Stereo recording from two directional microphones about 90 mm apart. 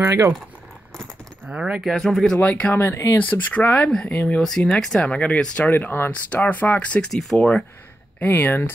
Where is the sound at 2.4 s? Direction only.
15° left (ahead or behind).